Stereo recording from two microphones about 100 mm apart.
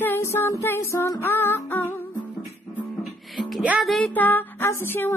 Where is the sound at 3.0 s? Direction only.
Centre (ahead or behind).